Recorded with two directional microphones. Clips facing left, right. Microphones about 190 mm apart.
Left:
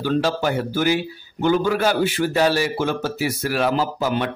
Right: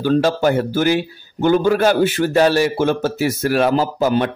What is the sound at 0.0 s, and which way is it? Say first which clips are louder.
A man's voice: right 5 dB; 45° right (ahead or behind).